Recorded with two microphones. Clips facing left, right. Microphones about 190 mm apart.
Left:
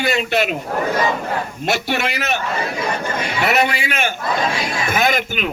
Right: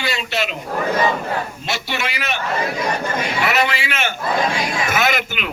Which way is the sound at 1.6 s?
55° left (ahead or behind).